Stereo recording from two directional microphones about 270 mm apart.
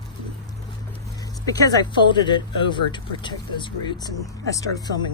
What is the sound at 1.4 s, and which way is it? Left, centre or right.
Speech, centre.